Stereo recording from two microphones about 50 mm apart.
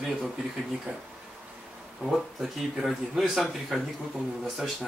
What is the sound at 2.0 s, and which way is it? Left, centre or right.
Speech, centre.